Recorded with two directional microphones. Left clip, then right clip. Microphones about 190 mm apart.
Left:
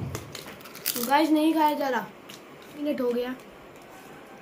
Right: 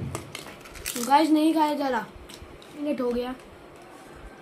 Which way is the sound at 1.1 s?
20° right (ahead or behind).